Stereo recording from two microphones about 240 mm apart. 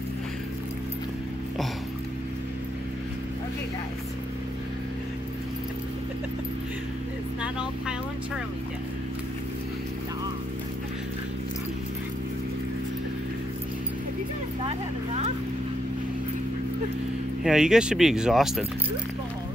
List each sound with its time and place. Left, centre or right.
14.6 s vehicle: right
17.4 s speech: centre